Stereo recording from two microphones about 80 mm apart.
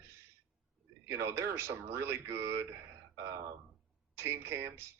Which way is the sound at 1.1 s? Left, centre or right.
Right.